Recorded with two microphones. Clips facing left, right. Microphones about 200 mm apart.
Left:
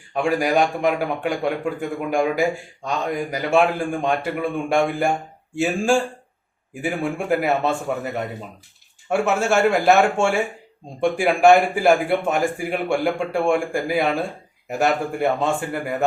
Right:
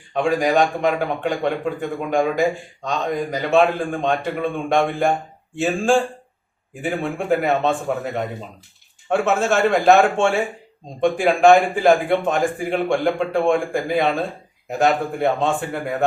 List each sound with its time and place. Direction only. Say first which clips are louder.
0.1 s a man's voice: right 1 dB; 10° left (ahead or behind)